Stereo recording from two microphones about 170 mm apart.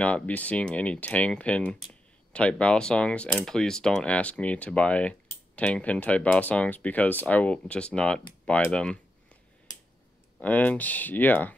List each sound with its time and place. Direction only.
0.0 s speech: 10° left (ahead or behind)
10.4 s speech: 10° left (ahead or behind)